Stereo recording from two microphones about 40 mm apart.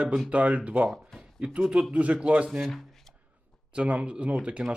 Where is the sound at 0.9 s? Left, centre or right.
Centre.